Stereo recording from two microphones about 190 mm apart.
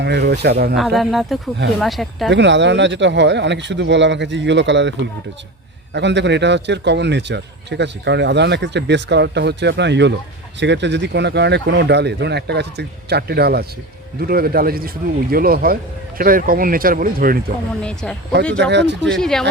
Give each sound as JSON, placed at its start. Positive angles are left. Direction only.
{"t": 0.0, "sound": "a man's voice", "side_deg": -60}
{"t": 0.8, "sound": "speech", "side_deg": 0}
{"t": 2.3, "sound": "a man's voice", "side_deg": -70}
{"t": 17.8, "sound": "speech", "side_deg": 5}
{"t": 18.5, "sound": "a man's voice", "side_deg": -65}
{"t": 19.0, "sound": "speech", "side_deg": 5}